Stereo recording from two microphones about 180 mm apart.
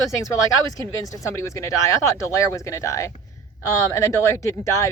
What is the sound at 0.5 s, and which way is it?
Speech, 20° left (ahead or behind).